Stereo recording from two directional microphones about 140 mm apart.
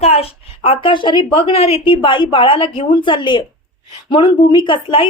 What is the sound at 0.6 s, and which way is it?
A woman's voice, 35° left (ahead or behind).